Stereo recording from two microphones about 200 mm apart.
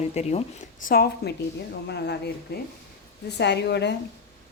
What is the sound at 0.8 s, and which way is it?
A woman's voice, 50° left (ahead or behind).